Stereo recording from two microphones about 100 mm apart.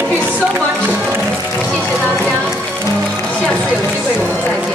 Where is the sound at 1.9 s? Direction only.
15° right (ahead or behind).